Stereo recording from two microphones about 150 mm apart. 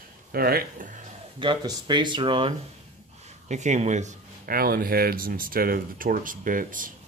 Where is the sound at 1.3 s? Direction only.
30° right (ahead or behind).